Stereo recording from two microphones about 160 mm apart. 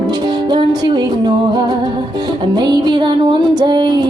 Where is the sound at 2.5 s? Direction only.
25° right (ahead or behind).